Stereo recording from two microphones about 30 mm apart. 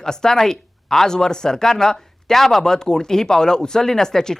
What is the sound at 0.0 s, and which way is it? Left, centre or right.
Speech, left.